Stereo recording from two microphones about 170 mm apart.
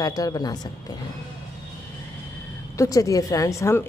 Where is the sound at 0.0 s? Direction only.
20° left (ahead or behind).